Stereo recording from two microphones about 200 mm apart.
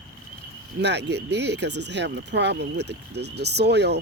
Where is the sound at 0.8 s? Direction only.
60° right (ahead or behind).